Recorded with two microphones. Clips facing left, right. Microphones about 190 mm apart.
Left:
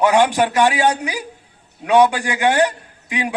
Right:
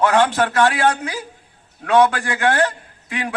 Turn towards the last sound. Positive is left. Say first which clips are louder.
# left 3 dB
turn(degrees=15)  # may be behind; listen again after turning